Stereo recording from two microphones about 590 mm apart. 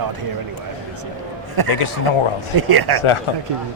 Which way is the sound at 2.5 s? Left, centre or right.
Right.